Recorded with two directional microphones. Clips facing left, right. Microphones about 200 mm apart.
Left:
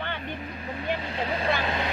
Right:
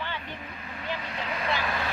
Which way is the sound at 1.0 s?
30° left (ahead or behind).